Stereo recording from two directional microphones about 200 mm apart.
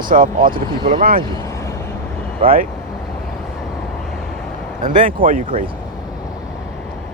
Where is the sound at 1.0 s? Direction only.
45° right (ahead or behind).